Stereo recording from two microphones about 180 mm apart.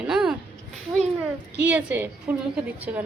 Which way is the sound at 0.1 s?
5° right (ahead or behind).